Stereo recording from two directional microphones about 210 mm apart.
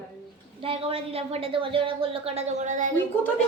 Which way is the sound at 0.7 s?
25° right (ahead or behind).